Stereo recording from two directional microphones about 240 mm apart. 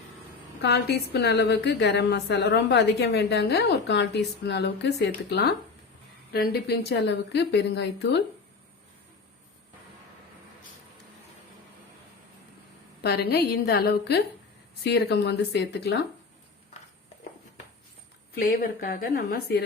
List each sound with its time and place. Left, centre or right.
0.6 s a woman's voice: left
13.0 s a woman's voice: left
18.3 s speech: left